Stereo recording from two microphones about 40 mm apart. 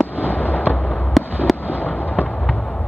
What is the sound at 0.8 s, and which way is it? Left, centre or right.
Fireworks, left.